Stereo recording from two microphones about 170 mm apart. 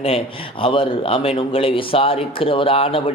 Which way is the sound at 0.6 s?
30° left (ahead or behind).